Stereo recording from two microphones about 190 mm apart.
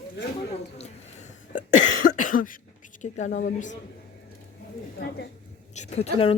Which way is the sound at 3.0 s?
40° left (ahead or behind).